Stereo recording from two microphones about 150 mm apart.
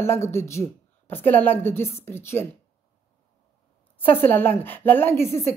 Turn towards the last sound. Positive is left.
turn(degrees=15)  # may be behind; listen again after turning